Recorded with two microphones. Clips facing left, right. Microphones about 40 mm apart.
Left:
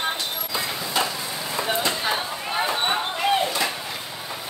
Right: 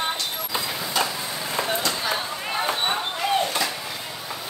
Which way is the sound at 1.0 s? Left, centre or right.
Centre.